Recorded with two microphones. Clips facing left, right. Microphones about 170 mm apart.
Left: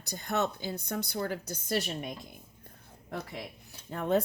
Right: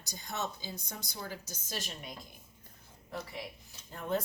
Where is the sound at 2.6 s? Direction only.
60° left (ahead or behind).